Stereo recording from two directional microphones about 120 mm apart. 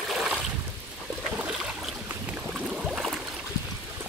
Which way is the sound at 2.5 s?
5° right (ahead or behind).